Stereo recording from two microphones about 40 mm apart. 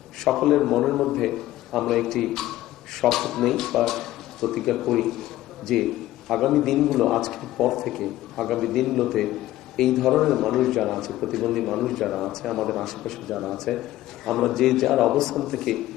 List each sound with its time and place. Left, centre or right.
0.3 s a man's voice: centre